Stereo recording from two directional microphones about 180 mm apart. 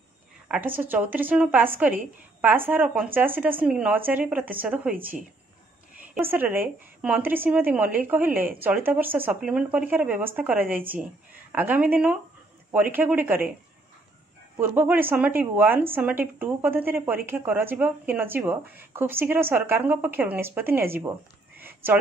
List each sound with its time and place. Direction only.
0.5 s speech: 10° right (ahead or behind)
14.6 s speech: 10° right (ahead or behind)
21.5 s a sound: 10° right (ahead or behind)